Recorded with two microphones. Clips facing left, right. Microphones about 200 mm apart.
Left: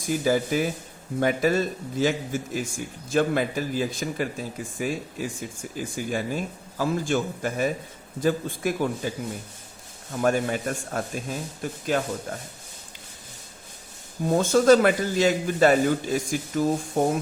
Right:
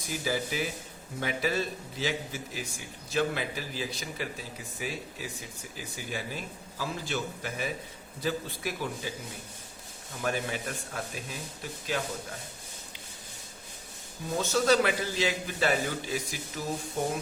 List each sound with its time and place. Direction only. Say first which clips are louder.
0.0 s a man's voice: left 9 dB; 50° left (ahead or behind)
10.2 s a man's voice: left 9 dB; 50° left (ahead or behind)
14.3 s a man's voice: left 8 dB; 50° left (ahead or behind)